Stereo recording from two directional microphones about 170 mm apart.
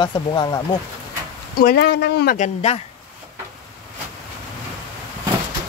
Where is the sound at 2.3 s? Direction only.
45° left (ahead or behind).